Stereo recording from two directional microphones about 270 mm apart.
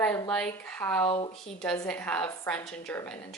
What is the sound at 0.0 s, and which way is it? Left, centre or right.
A woman's voice, centre.